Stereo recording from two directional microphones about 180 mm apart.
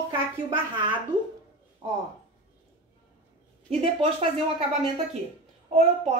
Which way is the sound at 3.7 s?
35° right (ahead or behind).